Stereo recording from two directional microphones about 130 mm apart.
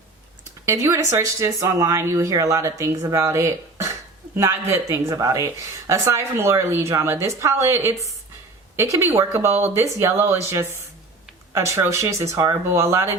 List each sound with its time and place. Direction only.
0.6 s speech: 20° right (ahead or behind)